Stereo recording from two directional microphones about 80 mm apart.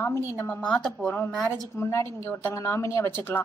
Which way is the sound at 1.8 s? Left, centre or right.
Left.